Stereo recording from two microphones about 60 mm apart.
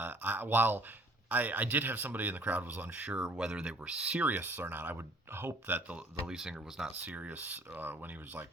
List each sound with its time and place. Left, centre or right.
0.0 s speech: right
3.2 s speech: centre
4.3 s speech: right
6.2 s speech: centre
7.0 s speech: right